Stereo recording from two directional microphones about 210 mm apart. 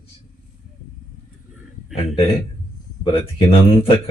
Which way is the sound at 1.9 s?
25° left (ahead or behind).